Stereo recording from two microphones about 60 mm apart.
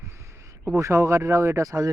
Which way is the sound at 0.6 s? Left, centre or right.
Right.